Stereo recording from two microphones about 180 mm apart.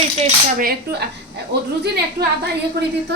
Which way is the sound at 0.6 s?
55° right (ahead or behind).